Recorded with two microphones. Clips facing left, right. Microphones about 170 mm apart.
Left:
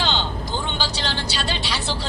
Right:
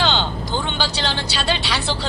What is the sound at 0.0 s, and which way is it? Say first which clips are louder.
Vehicle: right 4 dB; 70° right (ahead or behind).